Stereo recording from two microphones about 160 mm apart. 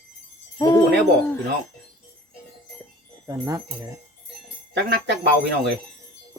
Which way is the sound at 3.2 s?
20° right (ahead or behind).